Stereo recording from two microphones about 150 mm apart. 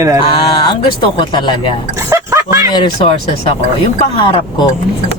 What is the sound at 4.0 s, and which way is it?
Speech, 35° left (ahead or behind).